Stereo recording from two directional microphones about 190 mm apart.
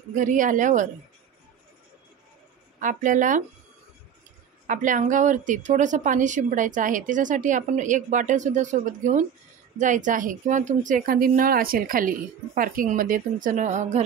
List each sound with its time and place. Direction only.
0.1 s a woman's voice: 45° right (ahead or behind)
2.8 s a woman's voice: 45° right (ahead or behind)
4.6 s a woman's voice: 40° right (ahead or behind)